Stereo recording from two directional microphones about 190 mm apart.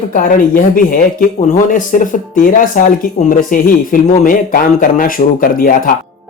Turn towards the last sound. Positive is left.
turn(degrees=45)  # may be behind; listen again after turning